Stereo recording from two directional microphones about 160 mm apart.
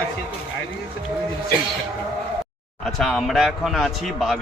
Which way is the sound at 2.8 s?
Centre (ahead or behind).